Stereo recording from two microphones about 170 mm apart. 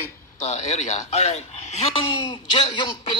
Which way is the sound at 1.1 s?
40° left (ahead or behind).